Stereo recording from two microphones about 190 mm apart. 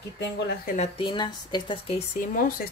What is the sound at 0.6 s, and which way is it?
Speech, 40° left (ahead or behind).